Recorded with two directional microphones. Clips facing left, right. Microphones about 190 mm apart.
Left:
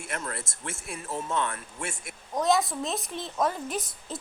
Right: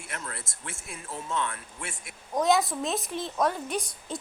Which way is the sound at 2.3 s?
Centre (ahead or behind).